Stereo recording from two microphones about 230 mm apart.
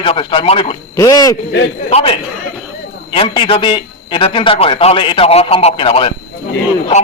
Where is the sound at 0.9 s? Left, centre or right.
Centre.